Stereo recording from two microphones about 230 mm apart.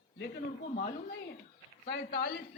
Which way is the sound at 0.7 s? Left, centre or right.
Left.